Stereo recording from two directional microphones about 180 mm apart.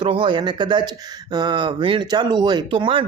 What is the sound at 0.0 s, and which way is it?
Speech, 30° right (ahead or behind).